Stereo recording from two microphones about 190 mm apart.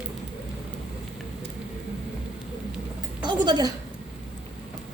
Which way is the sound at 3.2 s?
25° right (ahead or behind).